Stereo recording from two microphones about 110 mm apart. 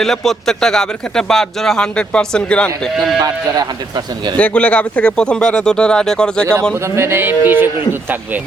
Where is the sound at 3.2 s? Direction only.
35° right (ahead or behind).